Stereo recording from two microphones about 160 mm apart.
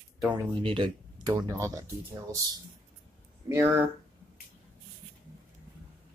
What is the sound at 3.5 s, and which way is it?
Speech, 15° right (ahead or behind).